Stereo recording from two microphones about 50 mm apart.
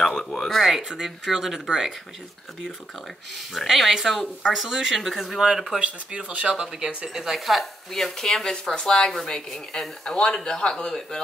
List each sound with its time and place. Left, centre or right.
0.0 s speech: centre
3.5 s speech: centre
5.8 s speech: right
7.2 s speech: centre